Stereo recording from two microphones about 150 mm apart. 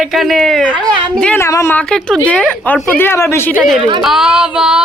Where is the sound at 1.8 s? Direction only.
5° left (ahead or behind).